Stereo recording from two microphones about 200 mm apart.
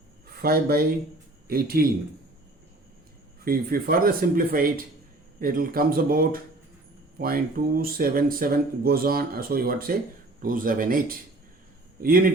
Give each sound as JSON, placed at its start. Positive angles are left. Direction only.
{"t": 0.4, "sound": "speech", "side_deg": -50}
{"t": 3.4, "sound": "speech", "side_deg": -50}
{"t": 5.4, "sound": "speech", "side_deg": -45}